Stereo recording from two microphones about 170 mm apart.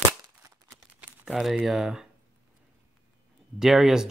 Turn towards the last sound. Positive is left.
turn(degrees=0)  # may be behind; listen again after turning